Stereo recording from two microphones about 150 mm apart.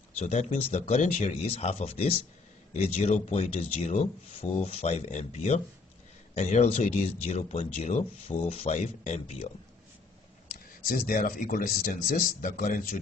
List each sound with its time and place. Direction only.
0.2 s speech: 50° left (ahead or behind)
10.5 s speech: 75° left (ahead or behind)